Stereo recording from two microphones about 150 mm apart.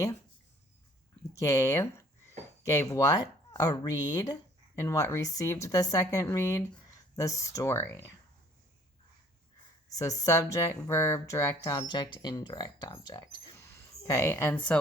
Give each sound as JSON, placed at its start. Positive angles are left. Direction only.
{"t": 1.4, "sound": "speech", "side_deg": 20}
{"t": 9.9, "sound": "speech", "side_deg": 25}